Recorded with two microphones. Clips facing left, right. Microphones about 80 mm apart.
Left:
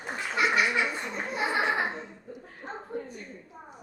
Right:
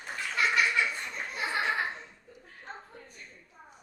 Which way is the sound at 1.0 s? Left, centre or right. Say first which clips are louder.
Left 5 dB; left.